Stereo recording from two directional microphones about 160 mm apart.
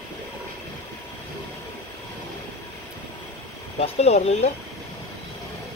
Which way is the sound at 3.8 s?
40° left (ahead or behind).